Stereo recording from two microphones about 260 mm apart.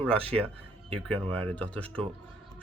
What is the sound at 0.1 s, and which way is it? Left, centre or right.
Speech, right.